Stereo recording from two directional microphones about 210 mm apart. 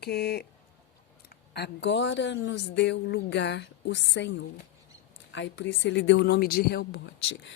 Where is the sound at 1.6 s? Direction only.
55° left (ahead or behind).